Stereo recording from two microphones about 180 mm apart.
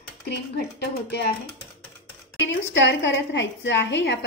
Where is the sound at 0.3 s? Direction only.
65° left (ahead or behind).